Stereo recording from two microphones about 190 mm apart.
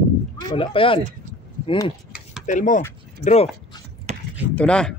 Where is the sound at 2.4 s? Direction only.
40° left (ahead or behind).